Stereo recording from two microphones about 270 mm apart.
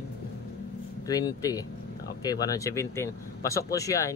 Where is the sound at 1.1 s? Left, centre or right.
Centre.